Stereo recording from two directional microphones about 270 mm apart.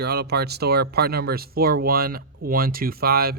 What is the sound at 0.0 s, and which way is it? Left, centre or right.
Speech, right.